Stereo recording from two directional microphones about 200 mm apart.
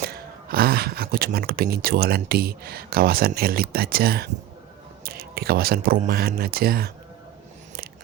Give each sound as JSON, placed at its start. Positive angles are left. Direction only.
{"t": 0.0, "sound": "speech", "side_deg": -50}